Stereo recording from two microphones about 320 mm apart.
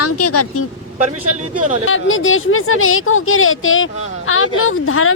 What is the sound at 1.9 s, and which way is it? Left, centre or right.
Speech, left.